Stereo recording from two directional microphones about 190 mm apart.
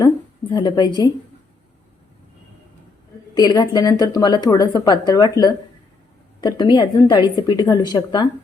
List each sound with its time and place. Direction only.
0.5 s a woman's voice: 20° left (ahead or behind)
3.3 s a woman's voice: 20° left (ahead or behind)